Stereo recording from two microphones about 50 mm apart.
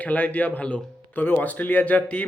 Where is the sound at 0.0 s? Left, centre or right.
Left.